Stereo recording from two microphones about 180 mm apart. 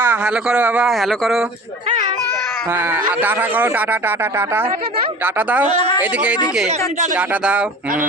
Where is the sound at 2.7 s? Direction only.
10° right (ahead or behind).